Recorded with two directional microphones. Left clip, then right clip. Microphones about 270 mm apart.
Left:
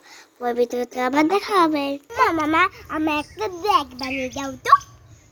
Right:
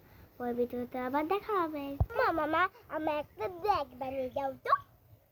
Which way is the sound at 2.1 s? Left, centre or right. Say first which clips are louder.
Left 11 dB; centre.